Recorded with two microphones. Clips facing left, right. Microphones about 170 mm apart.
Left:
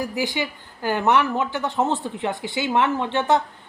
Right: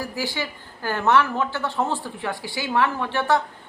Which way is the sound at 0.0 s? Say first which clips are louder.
Left 3 dB; 20° left (ahead or behind).